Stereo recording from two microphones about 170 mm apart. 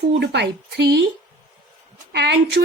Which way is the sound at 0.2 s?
90° right.